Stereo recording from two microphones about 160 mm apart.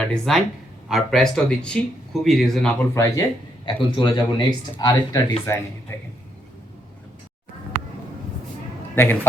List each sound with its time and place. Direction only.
0.0 s speech: 5° left (ahead or behind)
2.9 s speech: 20° left (ahead or behind)
3.7 s speech: 30° left (ahead or behind)
9.0 s speech: 15° left (ahead or behind)